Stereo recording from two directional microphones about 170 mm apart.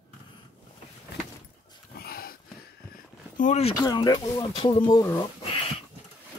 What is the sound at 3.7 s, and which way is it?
Speech, 25° left (ahead or behind).